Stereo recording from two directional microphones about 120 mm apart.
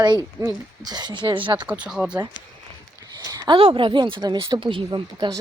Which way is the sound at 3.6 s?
50° right (ahead or behind).